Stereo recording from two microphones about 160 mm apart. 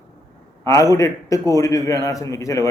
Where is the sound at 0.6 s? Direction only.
20° left (ahead or behind).